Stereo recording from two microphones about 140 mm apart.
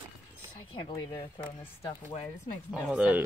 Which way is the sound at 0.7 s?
40° left (ahead or behind).